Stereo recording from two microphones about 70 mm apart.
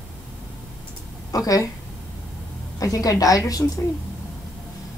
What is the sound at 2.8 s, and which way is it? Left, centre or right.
Speech, left.